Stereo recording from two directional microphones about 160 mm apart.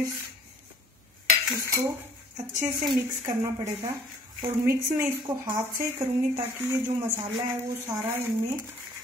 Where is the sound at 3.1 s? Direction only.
15° right (ahead or behind).